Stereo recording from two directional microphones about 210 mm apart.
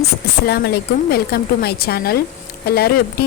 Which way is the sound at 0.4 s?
50° left (ahead or behind).